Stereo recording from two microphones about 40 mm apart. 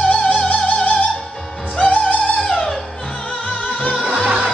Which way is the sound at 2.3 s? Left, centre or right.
Centre.